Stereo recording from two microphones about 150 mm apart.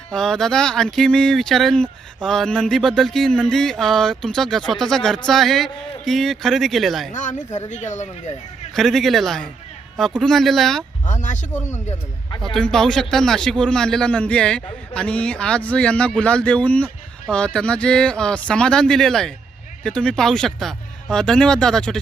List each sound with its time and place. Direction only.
0.1 s speech: 5° left (ahead or behind)
7.1 s speech: 55° left (ahead or behind)
8.7 s speech: centre (ahead or behind)
11.0 s speech: 55° left (ahead or behind)
11.5 s a man's voice: 15° left (ahead or behind)
12.5 s a man's voice: 5° left (ahead or behind)